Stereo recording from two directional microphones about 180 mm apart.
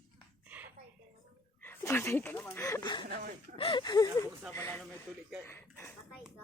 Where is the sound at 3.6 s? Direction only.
30° left (ahead or behind); by 4.8 s 15° left (ahead or behind).